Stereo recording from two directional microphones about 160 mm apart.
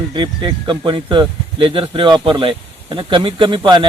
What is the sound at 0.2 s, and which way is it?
Speech, 30° right (ahead or behind).